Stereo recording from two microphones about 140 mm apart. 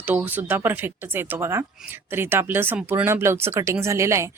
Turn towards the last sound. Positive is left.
turn(degrees=-20)  # may be behind; listen again after turning